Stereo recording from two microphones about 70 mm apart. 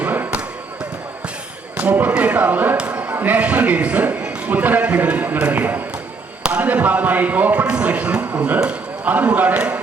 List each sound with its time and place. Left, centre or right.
0.0 s basketball bounce: right
1.7 s speech: centre
2.7 s a sound: centre
3.2 s a man's voice: right